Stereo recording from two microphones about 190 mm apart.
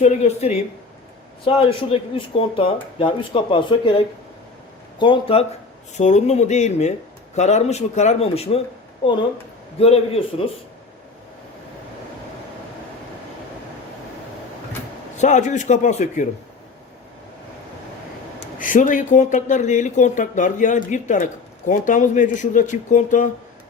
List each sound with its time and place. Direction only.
0.0 s speech: 35° left (ahead or behind)
9.8 s speech: 30° left (ahead or behind)
15.2 s speech: 40° left (ahead or behind)
18.6 s speech: 45° left (ahead or behind)